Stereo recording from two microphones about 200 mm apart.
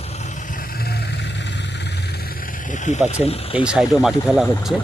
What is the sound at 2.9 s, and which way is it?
Speech, 35° left (ahead or behind).